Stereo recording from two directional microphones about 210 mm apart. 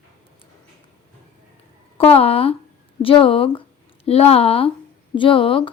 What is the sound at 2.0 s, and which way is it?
A woman's voice, 30° left (ahead or behind).